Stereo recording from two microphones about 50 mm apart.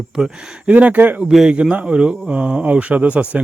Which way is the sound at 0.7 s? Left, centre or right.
Right.